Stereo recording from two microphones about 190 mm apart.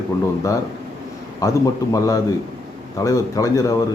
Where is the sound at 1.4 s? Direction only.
20° left (ahead or behind).